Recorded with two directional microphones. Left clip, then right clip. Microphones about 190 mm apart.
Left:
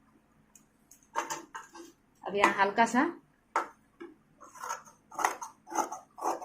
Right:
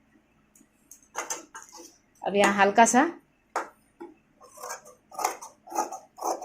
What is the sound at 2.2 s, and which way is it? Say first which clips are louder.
Speech: right 5 dB; 50° right (ahead or behind).